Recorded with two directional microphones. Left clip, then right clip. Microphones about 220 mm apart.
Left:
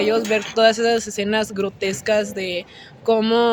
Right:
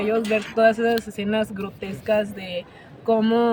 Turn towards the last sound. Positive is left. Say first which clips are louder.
# left 3 dB
turn(degrees=45)  # may be behind; listen again after turning